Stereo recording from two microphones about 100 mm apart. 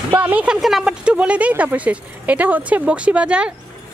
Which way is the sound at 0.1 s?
15° right (ahead or behind).